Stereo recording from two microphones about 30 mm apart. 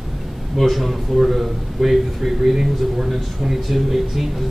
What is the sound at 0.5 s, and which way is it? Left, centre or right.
A man's voice, centre.